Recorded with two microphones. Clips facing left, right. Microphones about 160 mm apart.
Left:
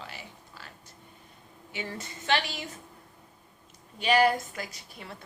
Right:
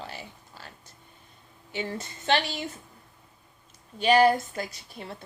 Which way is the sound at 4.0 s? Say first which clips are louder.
Right 3 dB; 35° right (ahead or behind).